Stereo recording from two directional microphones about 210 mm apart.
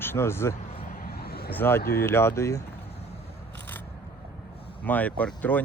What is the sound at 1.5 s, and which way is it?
Speech, 10° left (ahead or behind).